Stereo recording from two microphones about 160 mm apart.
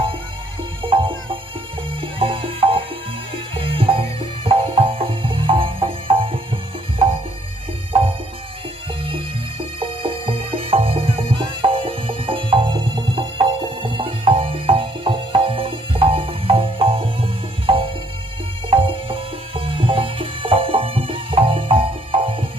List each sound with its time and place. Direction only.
0.8 s music: 35° right (ahead or behind)
9.0 s music: 35° right (ahead or behind)